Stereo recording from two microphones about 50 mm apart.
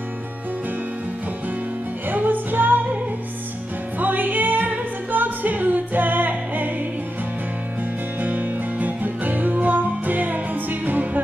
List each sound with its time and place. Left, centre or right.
2.0 s music: right
4.0 s music: right
8.2 s music: right